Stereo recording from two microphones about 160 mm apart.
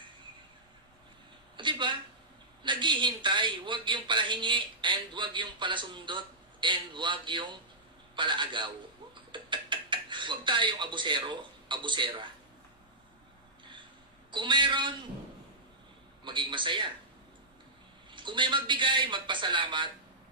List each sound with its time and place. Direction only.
1.6 s a sound: 30° right (ahead or behind)
2.6 s a man's voice: 30° right (ahead or behind)
9.3 s a sound: 30° right (ahead or behind)
14.3 s a man's voice: 30° right (ahead or behind)
16.3 s a man's voice: 30° right (ahead or behind)
18.1 s a man's voice: 30° right (ahead or behind)